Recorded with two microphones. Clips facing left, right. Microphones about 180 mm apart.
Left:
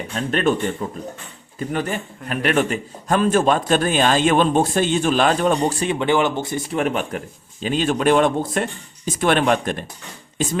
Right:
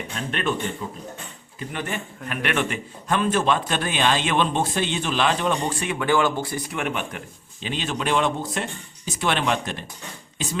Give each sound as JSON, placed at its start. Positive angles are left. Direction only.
{"t": 0.3, "sound": "speech", "side_deg": 40}
{"t": 1.5, "sound": "a man's voice", "side_deg": 40}
{"t": 5.9, "sound": "speech", "side_deg": 25}
{"t": 6.7, "sound": "a man's voice", "side_deg": 40}